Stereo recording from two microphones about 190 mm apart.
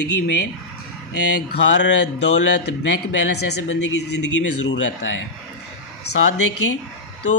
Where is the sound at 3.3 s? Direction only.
65° left (ahead or behind).